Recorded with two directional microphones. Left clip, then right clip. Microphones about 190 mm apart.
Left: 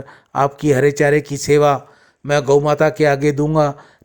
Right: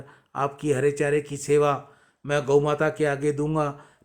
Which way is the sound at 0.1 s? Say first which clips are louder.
Left 10 dB; 35° left (ahead or behind).